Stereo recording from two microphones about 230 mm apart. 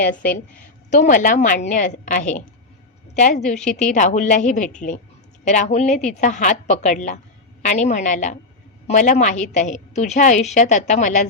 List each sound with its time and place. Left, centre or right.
0.0 s a woman's voice: left